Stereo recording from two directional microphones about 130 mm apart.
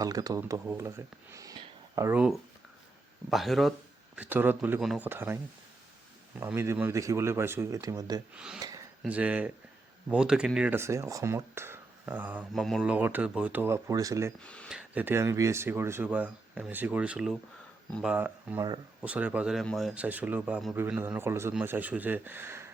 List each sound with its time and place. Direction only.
0.0 s speech: 25° right (ahead or behind)
3.2 s speech: centre (ahead or behind); by 5.4 s 15° right (ahead or behind)
6.4 s speech: 15° right (ahead or behind)
8.4 s speech: 5° right (ahead or behind)
10.8 s speech: 20° right (ahead or behind)
12.5 s speech: centre (ahead or behind); by 14.3 s 25° right (ahead or behind)
14.4 s speech: 10° left (ahead or behind)
14.7 s speech: 10° right (ahead or behind)